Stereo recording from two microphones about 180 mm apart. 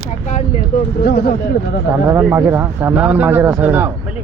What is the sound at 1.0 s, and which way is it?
Speech, 60° left (ahead or behind).